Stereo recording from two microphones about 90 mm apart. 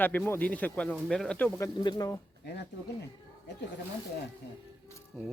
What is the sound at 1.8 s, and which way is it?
Speech, 55° left (ahead or behind).